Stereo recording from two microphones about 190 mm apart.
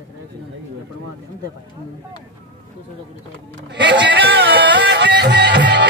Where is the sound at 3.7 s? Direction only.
70° right (ahead or behind).